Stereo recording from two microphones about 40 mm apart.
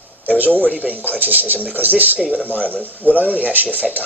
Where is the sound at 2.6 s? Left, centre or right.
Left.